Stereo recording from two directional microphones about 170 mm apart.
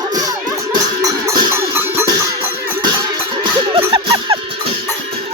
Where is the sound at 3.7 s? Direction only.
30° right (ahead or behind).